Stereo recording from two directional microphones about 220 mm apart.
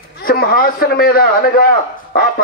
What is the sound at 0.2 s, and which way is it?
A man's voice, 45° left (ahead or behind).